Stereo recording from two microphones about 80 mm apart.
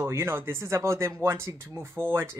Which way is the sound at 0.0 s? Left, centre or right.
Right.